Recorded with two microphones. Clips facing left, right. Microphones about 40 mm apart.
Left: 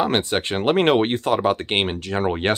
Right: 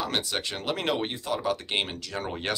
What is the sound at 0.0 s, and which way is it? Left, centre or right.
Speech, left.